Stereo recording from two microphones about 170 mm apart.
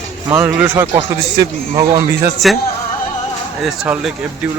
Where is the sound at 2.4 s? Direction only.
Centre (ahead or behind).